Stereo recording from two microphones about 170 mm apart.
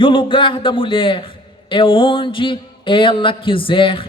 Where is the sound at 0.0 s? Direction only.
30° left (ahead or behind).